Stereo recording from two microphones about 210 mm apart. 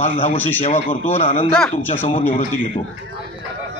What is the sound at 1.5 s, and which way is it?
Speech, 5° left (ahead or behind).